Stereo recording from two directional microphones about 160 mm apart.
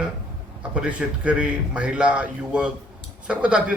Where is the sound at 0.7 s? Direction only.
5° right (ahead or behind).